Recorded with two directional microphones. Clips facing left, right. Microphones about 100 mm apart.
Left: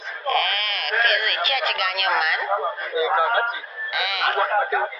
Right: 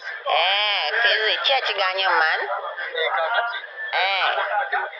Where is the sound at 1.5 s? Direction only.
35° right (ahead or behind).